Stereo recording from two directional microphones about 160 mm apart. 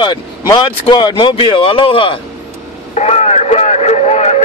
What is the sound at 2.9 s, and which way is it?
Radio, 45° left (ahead or behind).